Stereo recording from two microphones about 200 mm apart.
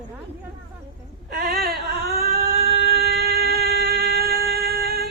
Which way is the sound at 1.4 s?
50° right (ahead or behind).